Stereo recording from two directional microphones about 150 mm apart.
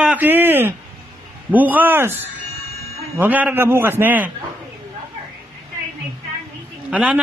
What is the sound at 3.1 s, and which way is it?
Speech, 10° right (ahead or behind).